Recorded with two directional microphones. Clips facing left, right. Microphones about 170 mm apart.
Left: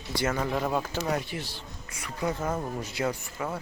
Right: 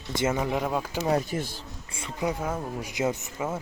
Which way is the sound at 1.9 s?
25° right (ahead or behind).